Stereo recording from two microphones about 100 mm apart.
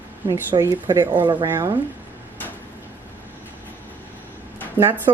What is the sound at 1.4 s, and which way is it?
Speech, 25° right (ahead or behind).